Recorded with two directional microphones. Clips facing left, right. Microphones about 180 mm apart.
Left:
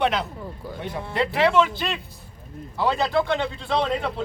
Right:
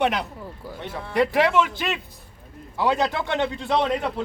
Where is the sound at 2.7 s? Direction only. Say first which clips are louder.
Left 1 dB; 20° right (ahead or behind).